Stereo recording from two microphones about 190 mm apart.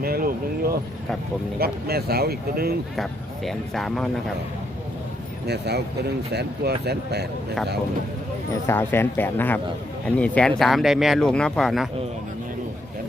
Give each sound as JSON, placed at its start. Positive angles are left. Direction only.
{"t": 0.0, "sound": "a sound", "side_deg": -50}
{"t": 1.5, "sound": "speech", "side_deg": -55}
{"t": 2.9, "sound": "speech", "side_deg": 0}
{"t": 5.5, "sound": "speech", "side_deg": -60}
{"t": 8.6, "sound": "speech", "side_deg": 10}